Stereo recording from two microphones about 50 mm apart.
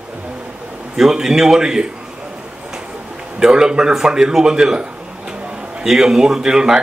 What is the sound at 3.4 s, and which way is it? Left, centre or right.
Speech, centre.